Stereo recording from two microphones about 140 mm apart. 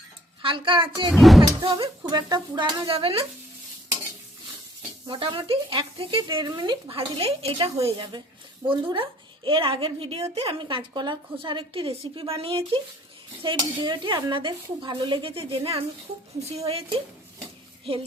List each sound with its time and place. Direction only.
0.4 s a woman's voice: 35° right (ahead or behind)
1.1 s speech: centre (ahead or behind)
1.5 s a woman's voice: 25° right (ahead or behind)
2.9 s a woman's voice: 40° right (ahead or behind)
5.0 s a woman's voice: 35° right (ahead or behind)
6.9 s a woman's voice: 45° right (ahead or behind)
8.9 s a woman's voice: 35° right (ahead or behind)